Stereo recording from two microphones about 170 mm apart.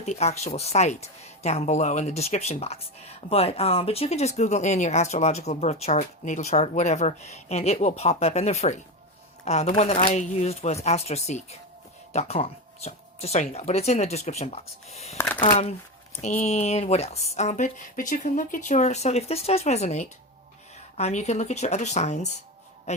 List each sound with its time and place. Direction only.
0.0 s speech: 40° left (ahead or behind)
16.2 s speech: 40° left (ahead or behind)